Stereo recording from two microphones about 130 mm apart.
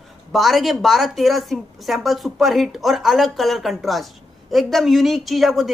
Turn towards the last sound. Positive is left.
turn(degrees=0)  # may be behind; listen again after turning